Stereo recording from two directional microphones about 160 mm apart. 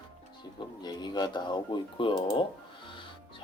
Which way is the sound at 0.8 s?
25° left (ahead or behind).